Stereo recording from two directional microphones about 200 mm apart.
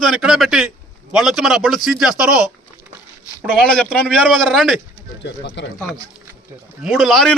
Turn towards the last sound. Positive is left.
turn(degrees=0)  # may be behind; listen again after turning